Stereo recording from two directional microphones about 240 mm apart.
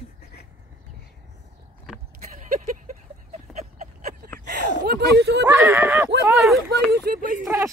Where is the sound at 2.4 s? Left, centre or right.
Right.